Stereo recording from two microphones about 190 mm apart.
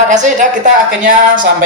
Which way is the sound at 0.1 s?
40° right (ahead or behind).